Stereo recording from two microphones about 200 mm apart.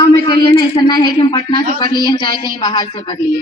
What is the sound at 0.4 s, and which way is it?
A woman's voice, 20° left (ahead or behind).